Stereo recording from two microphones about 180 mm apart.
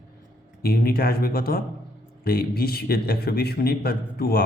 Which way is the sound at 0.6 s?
55° left (ahead or behind).